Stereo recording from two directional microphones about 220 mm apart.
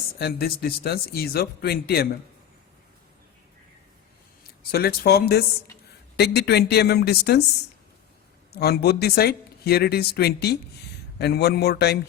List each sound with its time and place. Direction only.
0.2 s speech: 45° left (ahead or behind)
4.7 s speech: 45° left (ahead or behind)
8.5 s speech: 45° left (ahead or behind)